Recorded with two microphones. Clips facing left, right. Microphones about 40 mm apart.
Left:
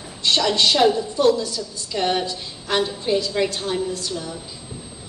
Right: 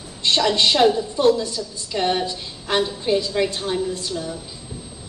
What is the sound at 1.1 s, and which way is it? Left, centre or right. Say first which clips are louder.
Speech: even; right.